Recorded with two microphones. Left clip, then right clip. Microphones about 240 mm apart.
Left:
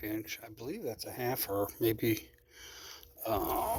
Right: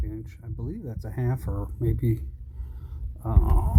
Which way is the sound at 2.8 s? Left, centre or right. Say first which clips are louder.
Left 1 dB; left.